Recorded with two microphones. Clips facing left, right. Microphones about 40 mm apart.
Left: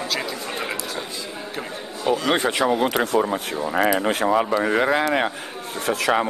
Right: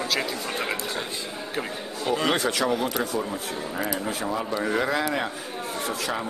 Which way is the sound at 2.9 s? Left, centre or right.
Left.